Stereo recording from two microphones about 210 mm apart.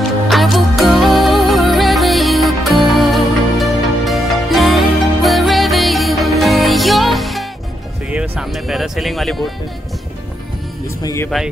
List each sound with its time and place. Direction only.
0.3 s music: centre (ahead or behind)
11.0 s music: 15° left (ahead or behind)